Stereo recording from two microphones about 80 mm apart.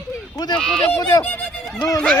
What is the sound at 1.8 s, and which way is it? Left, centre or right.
Speech, left.